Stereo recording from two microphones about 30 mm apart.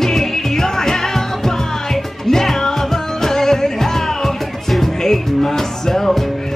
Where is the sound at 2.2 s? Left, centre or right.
Centre.